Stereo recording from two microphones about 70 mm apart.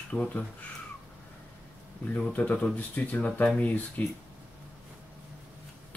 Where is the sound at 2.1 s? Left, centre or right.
Left.